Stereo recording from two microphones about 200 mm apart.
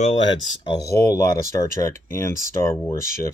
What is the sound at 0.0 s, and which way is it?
Speech, 25° left (ahead or behind).